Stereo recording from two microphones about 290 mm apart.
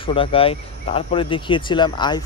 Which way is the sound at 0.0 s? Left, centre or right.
Centre.